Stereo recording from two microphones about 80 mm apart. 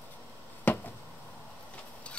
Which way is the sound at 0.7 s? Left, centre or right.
Left.